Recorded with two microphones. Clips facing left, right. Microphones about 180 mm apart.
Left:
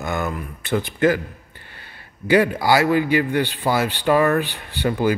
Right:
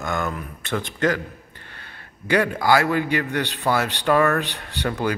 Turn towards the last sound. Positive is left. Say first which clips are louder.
# left 4 dB
turn(degrees=5)  # may be behind; listen again after turning